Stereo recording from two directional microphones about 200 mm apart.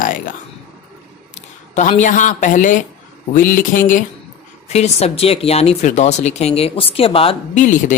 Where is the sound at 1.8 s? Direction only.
40° left (ahead or behind).